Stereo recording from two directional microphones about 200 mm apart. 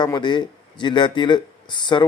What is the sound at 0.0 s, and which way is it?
Speech, 20° left (ahead or behind).